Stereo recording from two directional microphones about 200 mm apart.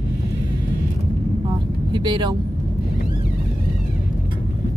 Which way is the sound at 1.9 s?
20° right (ahead or behind).